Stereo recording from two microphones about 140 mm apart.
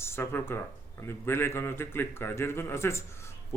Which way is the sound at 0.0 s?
15° left (ahead or behind).